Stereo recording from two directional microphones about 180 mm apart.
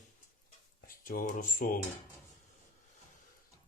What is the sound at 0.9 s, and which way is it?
Speech, 50° left (ahead or behind).